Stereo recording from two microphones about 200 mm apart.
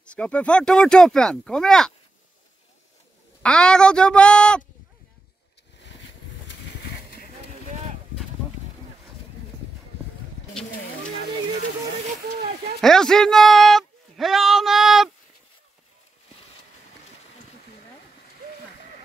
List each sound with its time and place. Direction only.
0.0 s speech: 5° left (ahead or behind)
3.4 s speech: 5° left (ahead or behind)
5.8 s vehicle: 65° left (ahead or behind)
6.8 s a sound: 50° left (ahead or behind)
12.4 s speech: 50° right (ahead or behind)
12.8 s speech: 5° left (ahead or behind)